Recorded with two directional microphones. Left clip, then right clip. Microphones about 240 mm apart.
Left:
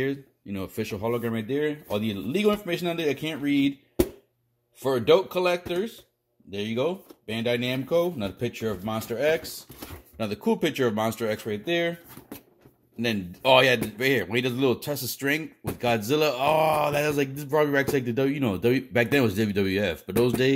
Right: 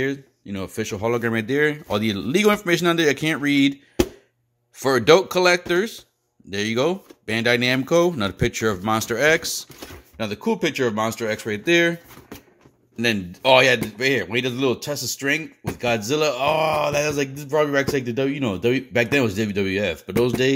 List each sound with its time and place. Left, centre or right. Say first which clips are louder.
0.0 s speech: right 4 dB; centre
4.8 s speech: right 5 dB; right
10.1 s speech: right 2 dB; centre
11.4 s speech: right 11 dB; right
12.9 s speech: right 6 dB; centre